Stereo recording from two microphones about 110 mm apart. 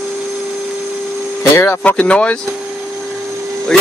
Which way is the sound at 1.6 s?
15° left (ahead or behind).